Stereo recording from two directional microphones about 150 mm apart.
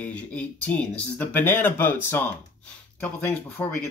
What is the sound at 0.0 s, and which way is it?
Speech, 10° left (ahead or behind).